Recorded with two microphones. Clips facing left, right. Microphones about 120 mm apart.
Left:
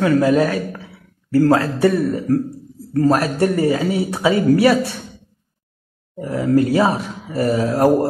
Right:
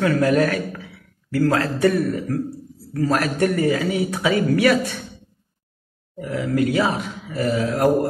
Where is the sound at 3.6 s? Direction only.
30° left (ahead or behind).